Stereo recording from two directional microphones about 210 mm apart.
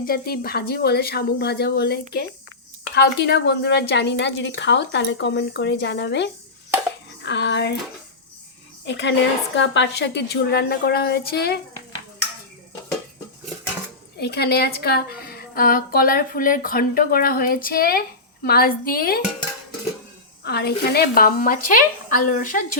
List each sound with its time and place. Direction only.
0.0 s a woman's voice: 45° left (ahead or behind)
8.8 s a woman's voice: 60° left (ahead or behind)
14.2 s speech: 50° left (ahead or behind)
20.4 s speech: 50° left (ahead or behind)